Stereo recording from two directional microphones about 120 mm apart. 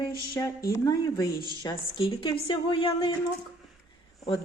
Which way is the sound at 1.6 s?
40° left (ahead or behind).